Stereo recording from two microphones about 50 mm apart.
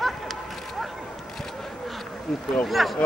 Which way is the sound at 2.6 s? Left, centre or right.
Centre.